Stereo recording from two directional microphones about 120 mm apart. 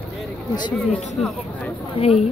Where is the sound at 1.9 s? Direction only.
55° left (ahead or behind).